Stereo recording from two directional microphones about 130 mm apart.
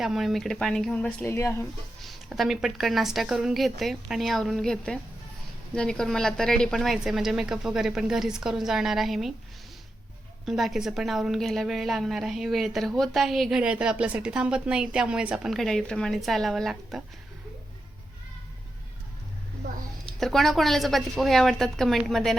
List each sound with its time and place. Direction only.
0.0 s a woman's voice: centre (ahead or behind)
1.2 s speech: 20° left (ahead or behind)
2.0 s a woman's voice: centre (ahead or behind)
10.4 s a woman's voice: centre (ahead or behind)
15.5 s a woman's voice: 5° left (ahead or behind)
20.1 s a woman's voice: centre (ahead or behind)